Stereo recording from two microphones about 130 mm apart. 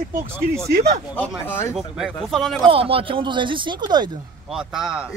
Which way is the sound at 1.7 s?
Centre (ahead or behind).